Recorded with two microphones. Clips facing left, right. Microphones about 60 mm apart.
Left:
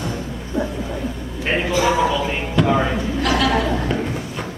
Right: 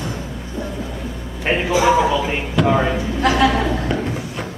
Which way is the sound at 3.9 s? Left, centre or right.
Centre.